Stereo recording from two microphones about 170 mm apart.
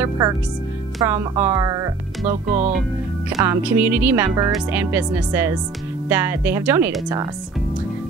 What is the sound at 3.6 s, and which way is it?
Speech, 10° right (ahead or behind).